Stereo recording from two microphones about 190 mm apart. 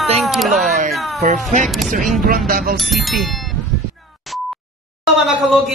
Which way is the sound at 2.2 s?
50° right (ahead or behind).